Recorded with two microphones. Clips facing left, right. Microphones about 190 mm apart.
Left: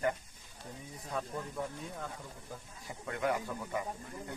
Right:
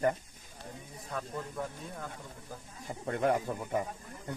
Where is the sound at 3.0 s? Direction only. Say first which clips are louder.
Right 5 dB; 40° right (ahead or behind).